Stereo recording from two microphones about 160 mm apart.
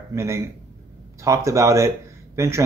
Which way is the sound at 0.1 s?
20° right (ahead or behind).